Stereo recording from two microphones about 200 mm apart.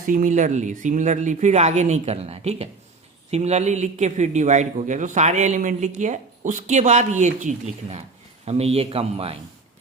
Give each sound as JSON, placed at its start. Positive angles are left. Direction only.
{"t": 0.0, "sound": "a man's voice", "side_deg": -40}